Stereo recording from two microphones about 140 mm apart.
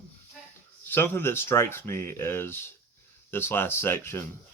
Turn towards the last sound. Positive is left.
turn(degrees=15)  # may be behind; listen again after turning